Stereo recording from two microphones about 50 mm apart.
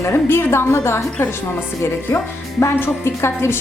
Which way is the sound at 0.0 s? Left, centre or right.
Left.